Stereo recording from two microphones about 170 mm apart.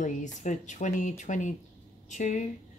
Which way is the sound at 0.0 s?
45° left (ahead or behind).